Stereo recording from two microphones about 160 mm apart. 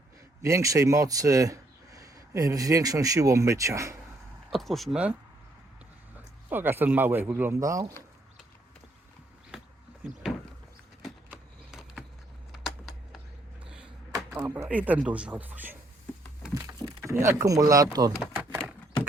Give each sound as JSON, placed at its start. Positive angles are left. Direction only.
{"t": 0.4, "sound": "speech", "side_deg": -20}
{"t": 4.5, "sound": "speech", "side_deg": 0}
{"t": 6.5, "sound": "speech", "side_deg": -10}
{"t": 11.3, "sound": "a sound", "side_deg": -5}
{"t": 12.5, "sound": "computer keyboard", "side_deg": -5}
{"t": 14.2, "sound": "a sound", "side_deg": -5}
{"t": 14.4, "sound": "speech", "side_deg": -20}
{"t": 17.0, "sound": "speech", "side_deg": -15}
{"t": 18.2, "sound": "typewriter", "side_deg": -10}